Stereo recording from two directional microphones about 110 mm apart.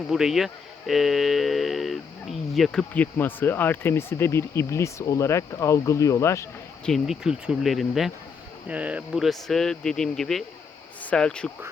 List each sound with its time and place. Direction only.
0.1 s speech: 5° right (ahead or behind)
2.9 s speech: 15° left (ahead or behind)
6.8 s speech: centre (ahead or behind)
8.6 s speech: 10° right (ahead or behind)
9.1 s speech: centre (ahead or behind)